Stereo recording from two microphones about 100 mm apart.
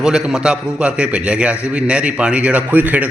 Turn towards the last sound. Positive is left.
turn(degrees=-15)  # may be behind; listen again after turning